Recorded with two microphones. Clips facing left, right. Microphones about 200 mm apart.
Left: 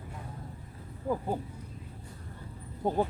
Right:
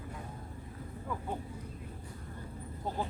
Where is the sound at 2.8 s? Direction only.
55° left (ahead or behind).